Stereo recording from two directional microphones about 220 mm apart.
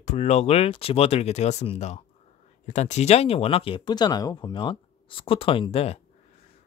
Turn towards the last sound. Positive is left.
turn(degrees=25)  # may be behind; listen again after turning